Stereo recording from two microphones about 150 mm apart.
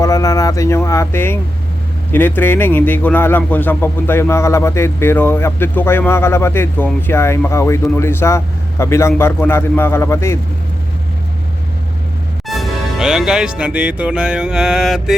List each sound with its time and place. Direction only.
0.0 s speech: 20° left (ahead or behind)
12.5 s music: centre (ahead or behind)